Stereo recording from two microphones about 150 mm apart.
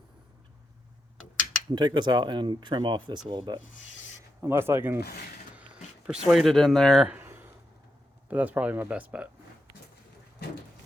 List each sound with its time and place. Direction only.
1.7 s speech: 30° right (ahead or behind)
4.4 s speech: 15° right (ahead or behind)
6.1 s speech: centre (ahead or behind)
8.3 s speech: 10° right (ahead or behind)